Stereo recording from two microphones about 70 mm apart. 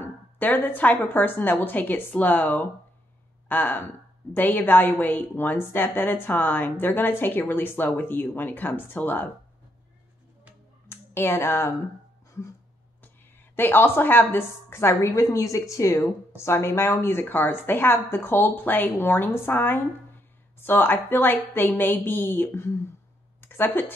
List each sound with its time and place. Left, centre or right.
0.0 s a woman's voice: left
10.9 s a woman's voice: left
13.6 s a woman's voice: left
15.0 s a woman's voice: left
23.4 s a sound: left